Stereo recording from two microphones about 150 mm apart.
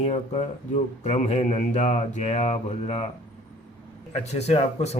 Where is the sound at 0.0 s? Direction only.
45° left (ahead or behind).